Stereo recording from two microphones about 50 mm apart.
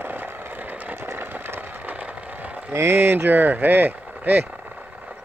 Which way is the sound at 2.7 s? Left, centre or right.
Right.